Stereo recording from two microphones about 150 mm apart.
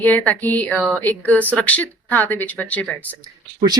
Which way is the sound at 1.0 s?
10° left (ahead or behind).